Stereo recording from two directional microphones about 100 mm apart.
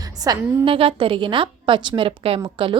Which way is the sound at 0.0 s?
40° right (ahead or behind).